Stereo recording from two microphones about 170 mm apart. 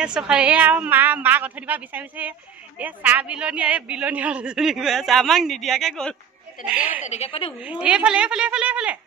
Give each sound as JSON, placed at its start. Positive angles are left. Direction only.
{"t": 0.0, "sound": "a woman's voice", "side_deg": -5}
{"t": 7.1, "sound": "a woman's voice", "side_deg": 35}
{"t": 7.8, "sound": "a man's voice", "side_deg": -5}